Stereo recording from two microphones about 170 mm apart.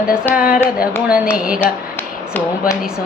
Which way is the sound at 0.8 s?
5° right (ahead or behind).